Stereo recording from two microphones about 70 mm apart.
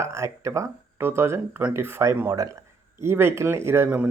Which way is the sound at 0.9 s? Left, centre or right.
Right.